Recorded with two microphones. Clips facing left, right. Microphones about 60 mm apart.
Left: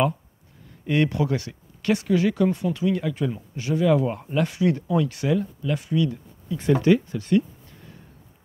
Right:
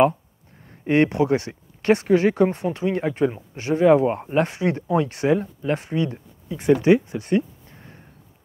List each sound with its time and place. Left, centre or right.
0.7 s speech: right